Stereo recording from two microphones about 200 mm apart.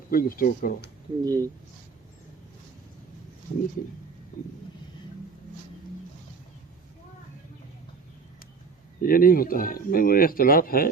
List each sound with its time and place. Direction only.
0.1 s speech: 45° left (ahead or behind)
1.2 s speech: 20° right (ahead or behind)
9.0 s speech: 45° left (ahead or behind)